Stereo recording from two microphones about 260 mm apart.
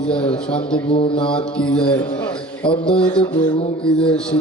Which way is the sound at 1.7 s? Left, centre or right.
Centre.